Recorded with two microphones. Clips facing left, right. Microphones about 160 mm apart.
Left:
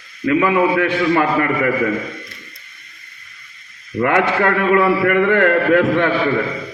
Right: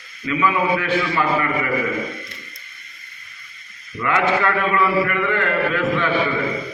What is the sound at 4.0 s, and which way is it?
A man's voice, 55° left (ahead or behind).